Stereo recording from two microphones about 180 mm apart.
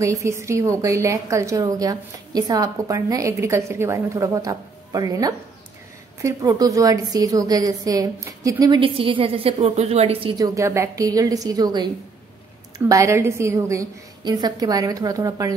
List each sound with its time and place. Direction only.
0.0 s a woman's voice: 15° right (ahead or behind); by 10.3 s 35° right (ahead or behind)
10.3 s a woman's voice: 20° right (ahead or behind)